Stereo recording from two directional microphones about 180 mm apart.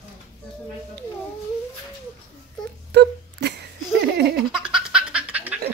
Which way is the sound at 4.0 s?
60° right (ahead or behind).